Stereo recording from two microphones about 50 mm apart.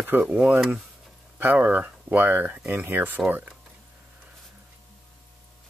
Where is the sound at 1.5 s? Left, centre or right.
Right.